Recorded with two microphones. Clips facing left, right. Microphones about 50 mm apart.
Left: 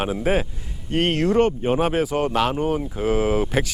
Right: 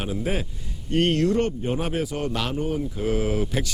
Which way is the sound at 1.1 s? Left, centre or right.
Left.